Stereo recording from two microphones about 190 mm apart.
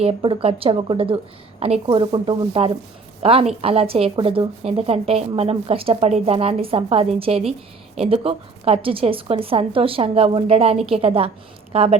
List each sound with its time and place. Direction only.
0.0 s a woman's voice: 30° right (ahead or behind)